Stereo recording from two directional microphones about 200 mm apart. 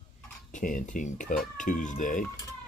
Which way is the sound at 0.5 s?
40° left (ahead or behind).